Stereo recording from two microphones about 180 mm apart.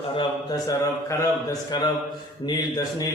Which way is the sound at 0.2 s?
20° left (ahead or behind).